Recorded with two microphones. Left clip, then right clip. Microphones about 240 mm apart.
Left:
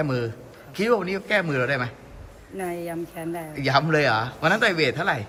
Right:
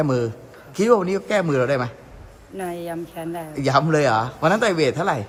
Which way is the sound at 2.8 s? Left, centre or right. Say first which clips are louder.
Right 2 dB; centre.